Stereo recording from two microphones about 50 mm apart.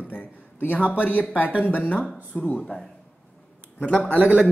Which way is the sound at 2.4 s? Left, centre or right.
Centre.